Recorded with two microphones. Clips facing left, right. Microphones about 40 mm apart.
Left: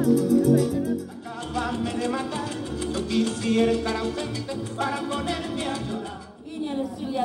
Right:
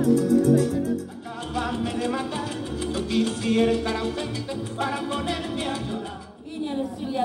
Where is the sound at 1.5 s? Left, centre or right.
Right.